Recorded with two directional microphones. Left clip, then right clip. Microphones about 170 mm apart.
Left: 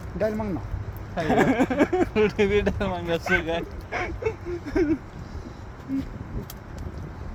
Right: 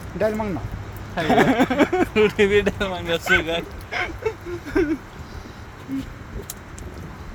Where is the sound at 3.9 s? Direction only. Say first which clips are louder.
Right 3 dB; 15° right (ahead or behind).